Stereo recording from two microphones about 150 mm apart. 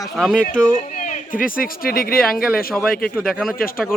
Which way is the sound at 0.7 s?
60° left (ahead or behind).